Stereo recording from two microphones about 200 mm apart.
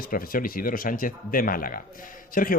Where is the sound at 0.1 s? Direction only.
45° left (ahead or behind).